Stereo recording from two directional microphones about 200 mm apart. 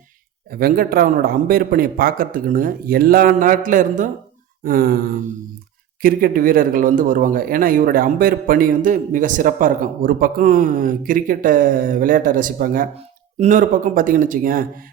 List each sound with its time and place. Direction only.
0.5 s speech: 50° right (ahead or behind)